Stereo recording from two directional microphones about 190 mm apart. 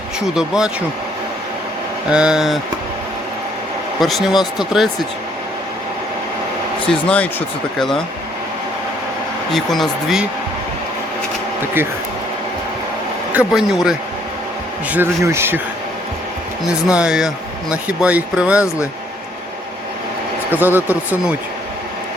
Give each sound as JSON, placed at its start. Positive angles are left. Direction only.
{"t": 0.3, "sound": "speech", "side_deg": -5}
{"t": 2.0, "sound": "speech", "side_deg": -5}
{"t": 4.0, "sound": "speech", "side_deg": 0}
{"t": 7.1, "sound": "speech", "side_deg": 5}
{"t": 9.5, "sound": "speech", "side_deg": 0}
{"t": 13.3, "sound": "speech", "side_deg": -5}
{"t": 16.6, "sound": "speech", "side_deg": -5}
{"t": 20.5, "sound": "speech", "side_deg": -10}